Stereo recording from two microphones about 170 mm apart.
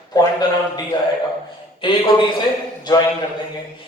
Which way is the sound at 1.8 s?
30° left (ahead or behind).